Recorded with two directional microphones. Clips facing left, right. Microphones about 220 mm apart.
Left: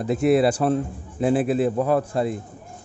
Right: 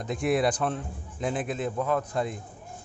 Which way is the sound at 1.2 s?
5° left (ahead or behind).